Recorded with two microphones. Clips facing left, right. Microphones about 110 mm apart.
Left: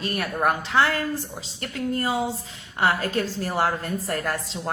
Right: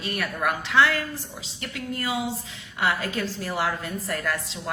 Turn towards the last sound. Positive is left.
turn(degrees=35)  # may be behind; listen again after turning